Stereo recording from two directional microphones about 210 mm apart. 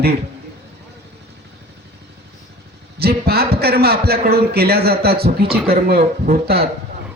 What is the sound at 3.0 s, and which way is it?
A man's voice, 50° right (ahead or behind).